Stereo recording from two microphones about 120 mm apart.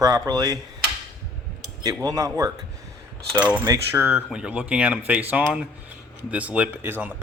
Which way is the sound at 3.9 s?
15° right (ahead or behind).